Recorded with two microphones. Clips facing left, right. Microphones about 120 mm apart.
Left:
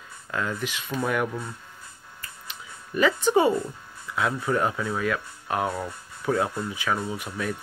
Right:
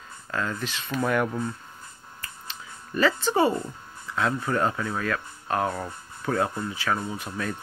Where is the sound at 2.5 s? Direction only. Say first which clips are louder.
Left 1 dB; 15° left (ahead or behind).